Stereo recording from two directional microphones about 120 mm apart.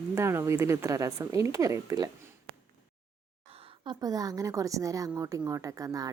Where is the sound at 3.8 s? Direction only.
30° right (ahead or behind).